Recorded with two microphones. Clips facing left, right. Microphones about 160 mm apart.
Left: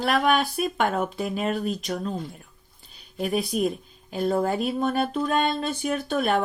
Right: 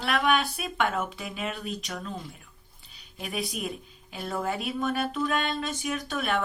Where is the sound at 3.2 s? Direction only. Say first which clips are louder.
Left 9 dB; 40° left (ahead or behind).